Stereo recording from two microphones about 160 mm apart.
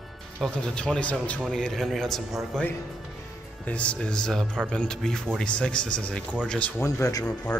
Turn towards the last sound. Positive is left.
turn(degrees=20)  # may be behind; listen again after turning